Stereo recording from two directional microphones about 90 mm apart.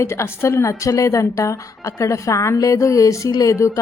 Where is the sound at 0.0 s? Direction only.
30° left (ahead or behind).